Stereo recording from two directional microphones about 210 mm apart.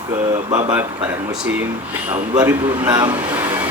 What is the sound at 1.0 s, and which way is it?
Speech, 5° right (ahead or behind).